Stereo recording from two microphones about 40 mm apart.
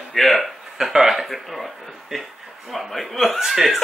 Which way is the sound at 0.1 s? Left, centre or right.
Centre.